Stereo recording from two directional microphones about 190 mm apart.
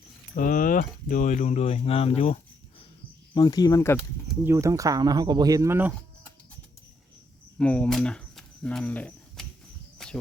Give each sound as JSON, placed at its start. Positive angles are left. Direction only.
{"t": 0.3, "sound": "speech", "side_deg": 45}
{"t": 3.3, "sound": "speech", "side_deg": 20}
{"t": 3.9, "sound": "speech", "side_deg": -5}
{"t": 4.5, "sound": "speech", "side_deg": -15}
{"t": 7.6, "sound": "speech", "side_deg": 5}
{"t": 10.0, "sound": "a sound", "side_deg": 5}